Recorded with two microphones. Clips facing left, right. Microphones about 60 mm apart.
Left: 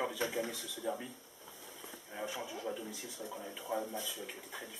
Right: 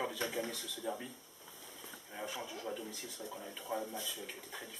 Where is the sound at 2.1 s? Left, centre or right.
Centre.